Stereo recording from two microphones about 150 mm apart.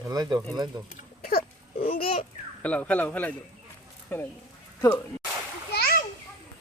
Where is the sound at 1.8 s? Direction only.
40° left (ahead or behind).